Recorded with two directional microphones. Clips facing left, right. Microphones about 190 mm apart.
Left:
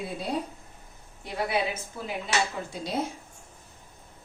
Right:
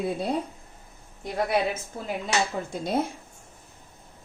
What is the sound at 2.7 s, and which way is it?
Speech, 50° right (ahead or behind).